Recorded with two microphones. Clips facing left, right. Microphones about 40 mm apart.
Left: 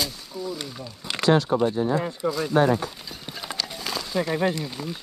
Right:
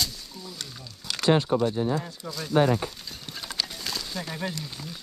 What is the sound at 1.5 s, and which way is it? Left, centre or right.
Speech, left.